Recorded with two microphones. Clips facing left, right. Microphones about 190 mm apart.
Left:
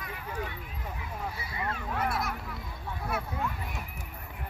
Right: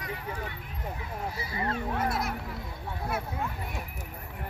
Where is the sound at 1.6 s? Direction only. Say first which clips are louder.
Right 3 dB; 25° right (ahead or behind).